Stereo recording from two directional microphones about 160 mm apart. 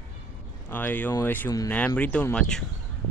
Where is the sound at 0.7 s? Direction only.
10° left (ahead or behind).